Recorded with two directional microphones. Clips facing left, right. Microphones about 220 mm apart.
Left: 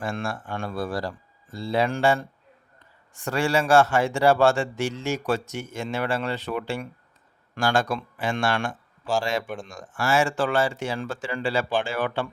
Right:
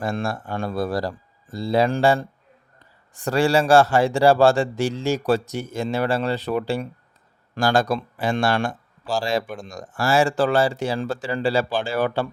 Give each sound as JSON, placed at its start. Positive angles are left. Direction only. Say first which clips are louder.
{"t": 0.0, "sound": "speech", "louder": "right 4 dB", "side_deg": -40}